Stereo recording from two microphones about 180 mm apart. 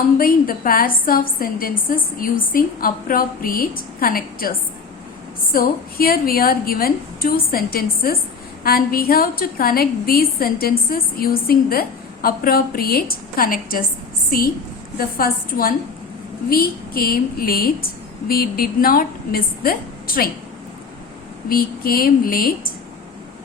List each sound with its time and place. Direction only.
0.2 s a woman's voice: 55° left (ahead or behind)
21.5 s a woman's voice: 55° left (ahead or behind)